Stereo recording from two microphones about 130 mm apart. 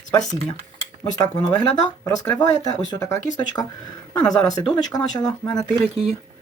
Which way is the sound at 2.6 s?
30° left (ahead or behind).